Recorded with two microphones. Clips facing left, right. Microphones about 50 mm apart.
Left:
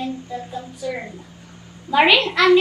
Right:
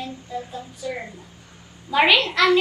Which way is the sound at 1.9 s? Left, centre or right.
Centre.